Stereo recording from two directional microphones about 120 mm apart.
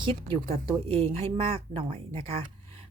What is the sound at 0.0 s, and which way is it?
Speech, 45° right (ahead or behind).